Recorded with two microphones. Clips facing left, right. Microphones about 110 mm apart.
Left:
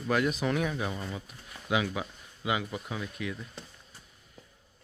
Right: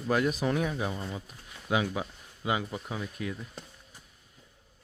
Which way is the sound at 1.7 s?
30° right (ahead or behind).